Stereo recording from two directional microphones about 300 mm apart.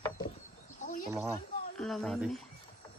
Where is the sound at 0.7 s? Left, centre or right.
Left.